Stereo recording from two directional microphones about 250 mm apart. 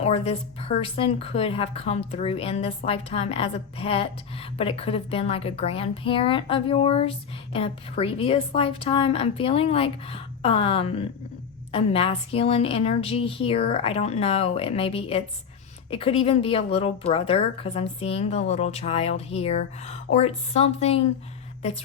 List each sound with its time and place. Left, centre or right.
0.0 s speech: left